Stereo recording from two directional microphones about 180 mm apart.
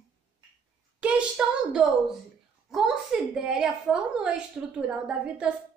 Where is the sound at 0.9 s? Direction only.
5° right (ahead or behind).